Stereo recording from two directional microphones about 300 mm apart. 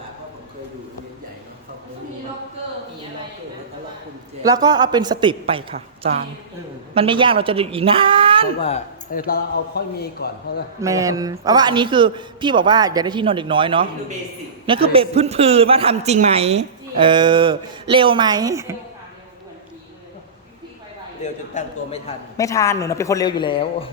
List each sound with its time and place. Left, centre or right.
4.4 s a man's voice: centre
8.6 s speech: left
10.8 s a man's voice: centre
21.5 s a man's voice: centre